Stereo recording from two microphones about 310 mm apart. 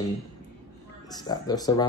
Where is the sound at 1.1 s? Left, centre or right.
Centre.